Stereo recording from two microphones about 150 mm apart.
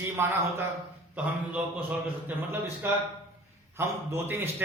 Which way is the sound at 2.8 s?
15° right (ahead or behind).